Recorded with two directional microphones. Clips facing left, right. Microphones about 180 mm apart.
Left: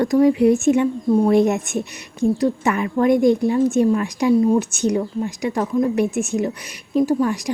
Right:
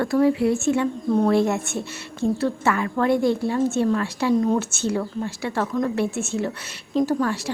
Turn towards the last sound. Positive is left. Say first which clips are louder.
# left 3 dB
turn(degrees=15)  # may be behind; listen again after turning